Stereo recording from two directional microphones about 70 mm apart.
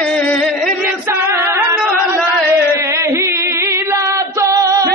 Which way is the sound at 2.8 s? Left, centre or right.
Right.